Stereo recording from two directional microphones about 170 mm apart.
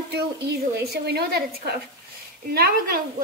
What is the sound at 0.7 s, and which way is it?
Speech, 75° right (ahead or behind).